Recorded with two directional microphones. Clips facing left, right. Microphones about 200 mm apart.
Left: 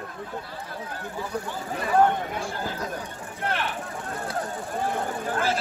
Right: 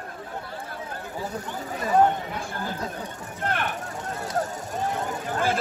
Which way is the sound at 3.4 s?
50° right (ahead or behind).